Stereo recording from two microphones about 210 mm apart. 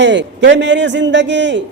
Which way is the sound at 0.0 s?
60° right (ahead or behind).